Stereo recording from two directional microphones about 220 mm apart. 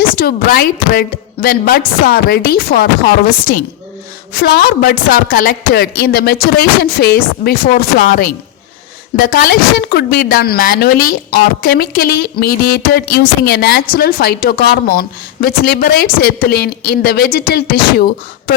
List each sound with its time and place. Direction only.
0.2 s a woman's voice: 45° left (ahead or behind)
4.4 s a woman's voice: 45° left (ahead or behind)